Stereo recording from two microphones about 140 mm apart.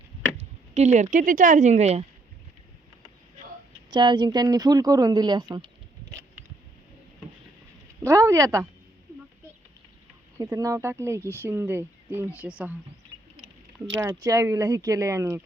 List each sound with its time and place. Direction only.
0.3 s speech: 55° right (ahead or behind)
3.8 s speech: 30° right (ahead or behind)
8.0 s speech: 20° right (ahead or behind)
10.3 s speech: 25° right (ahead or behind)
14.0 s speech: 20° right (ahead or behind)